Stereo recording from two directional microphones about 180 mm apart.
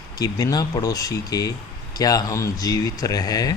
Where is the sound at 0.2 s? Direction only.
20° left (ahead or behind).